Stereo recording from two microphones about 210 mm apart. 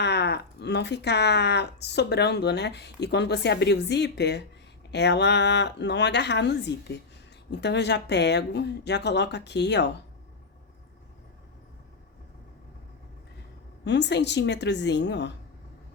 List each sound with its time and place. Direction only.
0.0 s speech: 55° left (ahead or behind)
13.8 s speech: 55° left (ahead or behind)